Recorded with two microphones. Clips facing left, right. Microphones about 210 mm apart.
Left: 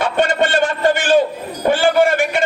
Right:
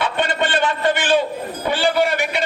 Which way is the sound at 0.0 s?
45° left (ahead or behind).